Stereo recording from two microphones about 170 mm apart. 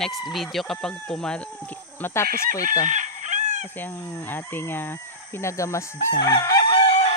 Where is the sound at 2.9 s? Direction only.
45° right (ahead or behind).